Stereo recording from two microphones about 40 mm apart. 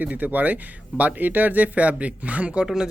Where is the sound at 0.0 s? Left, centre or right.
Right.